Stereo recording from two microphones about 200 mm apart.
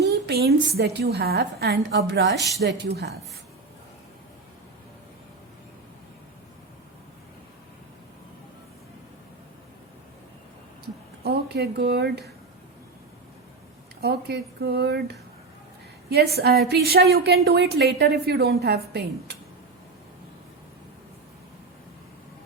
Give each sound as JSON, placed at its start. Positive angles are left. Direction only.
{"t": 0.0, "sound": "a woman's voice", "side_deg": -55}
{"t": 11.2, "sound": "a woman's voice", "side_deg": -55}
{"t": 14.0, "sound": "a woman's voice", "side_deg": -55}